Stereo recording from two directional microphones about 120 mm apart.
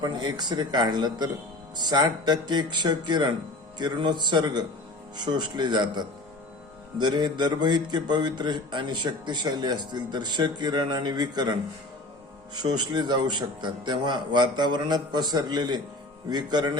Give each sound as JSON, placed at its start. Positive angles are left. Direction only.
{"t": 0.0, "sound": "speech", "side_deg": -35}
{"t": 12.5, "sound": "speech", "side_deg": -35}